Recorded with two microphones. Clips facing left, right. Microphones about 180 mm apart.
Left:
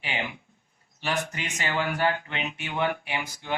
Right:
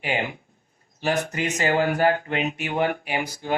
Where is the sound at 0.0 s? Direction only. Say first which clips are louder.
Right 6 dB; 40° right (ahead or behind).